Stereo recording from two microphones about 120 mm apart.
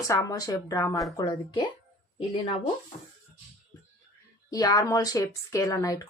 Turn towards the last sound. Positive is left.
turn(degrees=30)  # may be behind; listen again after turning